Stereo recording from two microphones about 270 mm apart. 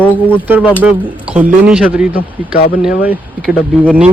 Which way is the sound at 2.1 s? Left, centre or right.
Left.